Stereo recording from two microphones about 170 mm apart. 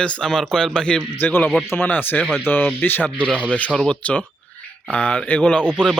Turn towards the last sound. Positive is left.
turn(degrees=-10)  # may be behind; listen again after turning